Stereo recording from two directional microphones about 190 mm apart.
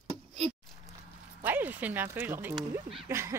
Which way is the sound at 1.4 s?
10° right (ahead or behind).